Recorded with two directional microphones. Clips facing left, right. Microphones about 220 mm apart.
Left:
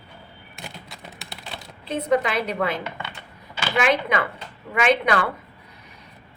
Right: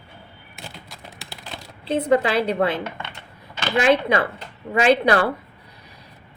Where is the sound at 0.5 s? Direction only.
Centre (ahead or behind).